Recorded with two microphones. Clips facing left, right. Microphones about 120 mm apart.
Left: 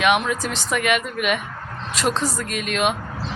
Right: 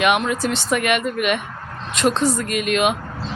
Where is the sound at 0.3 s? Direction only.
Centre (ahead or behind).